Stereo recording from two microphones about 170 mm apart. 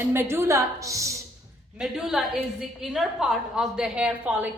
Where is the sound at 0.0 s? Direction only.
15° right (ahead or behind).